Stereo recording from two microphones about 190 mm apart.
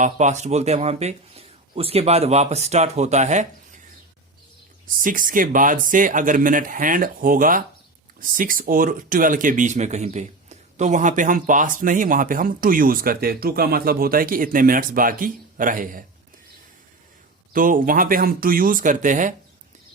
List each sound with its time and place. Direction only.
0.0 s speech: 40° right (ahead or behind)
4.9 s speech: 45° right (ahead or behind)
17.5 s speech: 45° right (ahead or behind)